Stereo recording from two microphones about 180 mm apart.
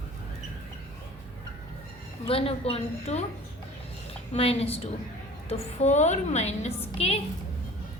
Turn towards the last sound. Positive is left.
turn(degrees=35)  # may be behind; listen again after turning